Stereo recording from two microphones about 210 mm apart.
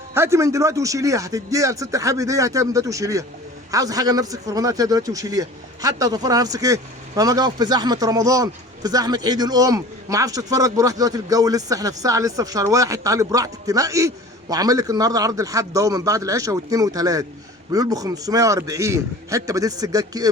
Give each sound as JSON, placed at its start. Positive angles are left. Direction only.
{"t": 0.1, "sound": "speech", "side_deg": -15}